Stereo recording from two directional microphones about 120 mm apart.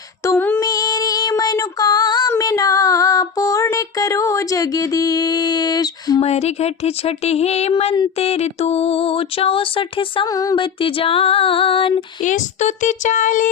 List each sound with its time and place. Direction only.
0.3 s female singing: 15° left (ahead or behind)
0.6 s female singing: 30° left (ahead or behind)
2.4 s music: 30° left (ahead or behind)
6.2 s speech: 60° left (ahead or behind)
8.2 s a sound: 60° left (ahead or behind)
10.3 s music: 30° left (ahead or behind)
10.6 s a sound: 45° left (ahead or behind)
12.2 s speech: 85° left